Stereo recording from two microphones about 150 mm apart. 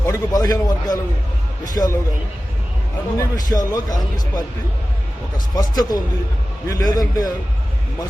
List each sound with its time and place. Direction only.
0.0 s a man's voice: 25° left (ahead or behind)
3.2 s a man's voice: 25° left (ahead or behind)
5.5 s a man's voice: 25° left (ahead or behind)